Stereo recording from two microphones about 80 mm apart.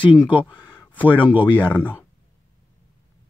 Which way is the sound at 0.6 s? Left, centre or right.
Left.